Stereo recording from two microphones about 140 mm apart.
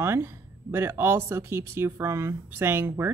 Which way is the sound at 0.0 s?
15° right (ahead or behind).